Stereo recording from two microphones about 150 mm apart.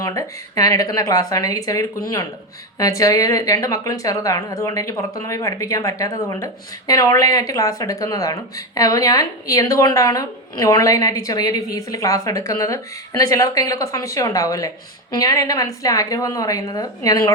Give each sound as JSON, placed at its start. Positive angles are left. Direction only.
{"t": 0.0, "sound": "speech", "side_deg": 25}